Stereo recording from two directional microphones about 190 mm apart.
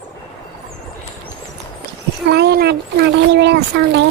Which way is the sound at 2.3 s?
60° right (ahead or behind).